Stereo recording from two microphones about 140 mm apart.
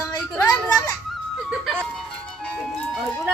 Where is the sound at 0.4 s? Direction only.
15° left (ahead or behind).